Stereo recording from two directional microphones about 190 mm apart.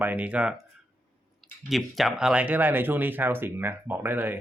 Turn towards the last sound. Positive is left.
turn(degrees=-10)  # may be behind; listen again after turning